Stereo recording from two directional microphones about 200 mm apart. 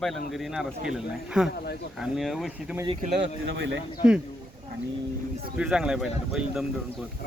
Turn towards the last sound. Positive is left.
turn(degrees=0)  # may be behind; listen again after turning